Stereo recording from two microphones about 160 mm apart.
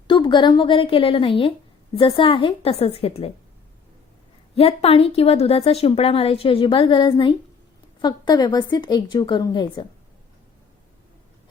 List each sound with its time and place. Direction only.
0.1 s a woman's voice: 30° left (ahead or behind)
4.5 s a woman's voice: 40° left (ahead or behind)